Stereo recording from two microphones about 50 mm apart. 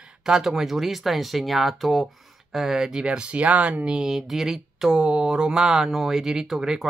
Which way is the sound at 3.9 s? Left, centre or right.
Centre.